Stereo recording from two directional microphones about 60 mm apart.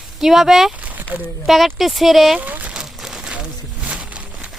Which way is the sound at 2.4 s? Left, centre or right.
Right.